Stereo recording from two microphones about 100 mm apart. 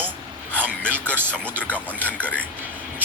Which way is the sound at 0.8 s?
10° left (ahead or behind).